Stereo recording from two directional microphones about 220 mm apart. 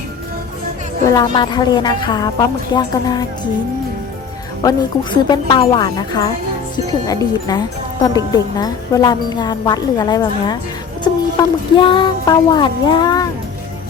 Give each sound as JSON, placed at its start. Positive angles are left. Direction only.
{"t": 1.0, "sound": "a woman's voice", "side_deg": 15}
{"t": 5.1, "sound": "a woman's voice", "side_deg": 20}